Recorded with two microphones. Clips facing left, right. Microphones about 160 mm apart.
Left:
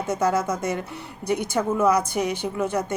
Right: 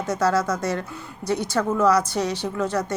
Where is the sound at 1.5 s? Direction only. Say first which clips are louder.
Right 1 dB; 15° left (ahead or behind).